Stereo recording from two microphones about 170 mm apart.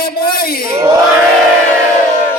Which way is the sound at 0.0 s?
60° left (ahead or behind).